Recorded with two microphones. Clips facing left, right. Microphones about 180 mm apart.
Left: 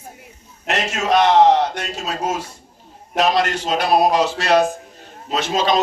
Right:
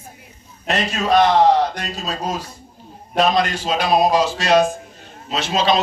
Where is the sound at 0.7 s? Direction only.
75° left (ahead or behind).